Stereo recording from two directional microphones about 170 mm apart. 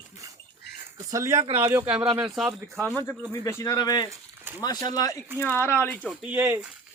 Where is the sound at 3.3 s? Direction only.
20° left (ahead or behind).